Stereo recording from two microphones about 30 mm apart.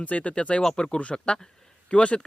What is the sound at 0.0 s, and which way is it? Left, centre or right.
Speech, left.